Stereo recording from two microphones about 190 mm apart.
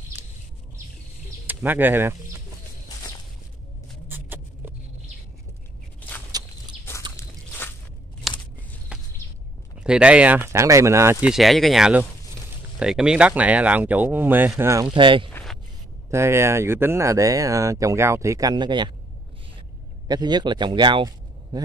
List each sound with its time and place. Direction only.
1.5 s speech: 10° right (ahead or behind)
4.1 s vehicle: 10° right (ahead or behind)
5.9 s biting: 10° left (ahead or behind)
7.2 s a sound: 10° left (ahead or behind)
8.3 s a sound: centre (ahead or behind)
9.8 s speech: 5° right (ahead or behind)
15.0 s speech: 25° right (ahead or behind)
16.1 s speech: 15° right (ahead or behind)
20.1 s a man's voice: 20° right (ahead or behind)